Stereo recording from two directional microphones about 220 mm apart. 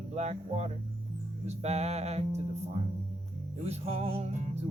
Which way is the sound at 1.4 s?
30° right (ahead or behind).